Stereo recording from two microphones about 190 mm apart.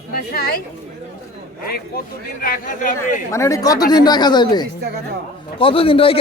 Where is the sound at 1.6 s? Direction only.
55° left (ahead or behind).